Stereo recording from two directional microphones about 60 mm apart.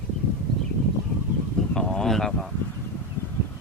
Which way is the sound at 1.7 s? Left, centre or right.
Centre.